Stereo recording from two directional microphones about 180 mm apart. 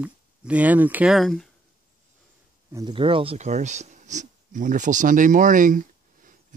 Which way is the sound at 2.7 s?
25° right (ahead or behind).